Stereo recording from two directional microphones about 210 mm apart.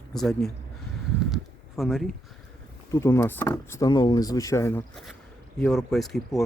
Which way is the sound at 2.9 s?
15° left (ahead or behind).